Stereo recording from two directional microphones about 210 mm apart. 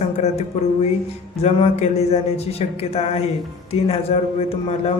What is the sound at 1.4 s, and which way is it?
A man's voice, 30° left (ahead or behind).